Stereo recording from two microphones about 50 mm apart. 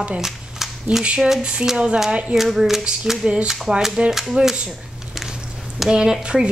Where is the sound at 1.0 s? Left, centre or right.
Right.